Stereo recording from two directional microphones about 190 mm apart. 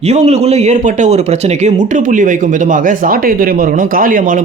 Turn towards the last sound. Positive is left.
turn(degrees=-45)  # may be behind; listen again after turning